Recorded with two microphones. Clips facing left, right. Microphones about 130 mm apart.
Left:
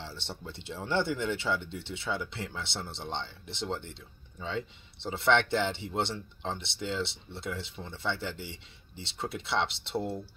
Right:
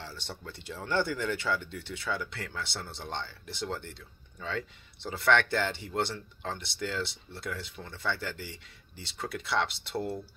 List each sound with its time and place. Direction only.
0.0 s speech: 25° left (ahead or behind)